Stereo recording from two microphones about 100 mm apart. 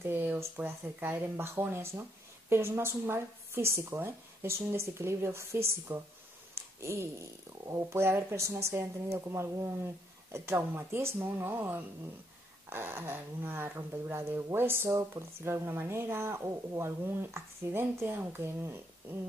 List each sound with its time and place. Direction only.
0.0 s speech: 20° right (ahead or behind)
6.5 s a sound: 25° right (ahead or behind)
7.7 s speech: 25° right (ahead or behind)